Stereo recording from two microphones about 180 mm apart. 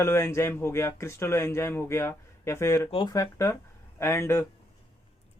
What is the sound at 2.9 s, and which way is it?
Speech, 25° left (ahead or behind).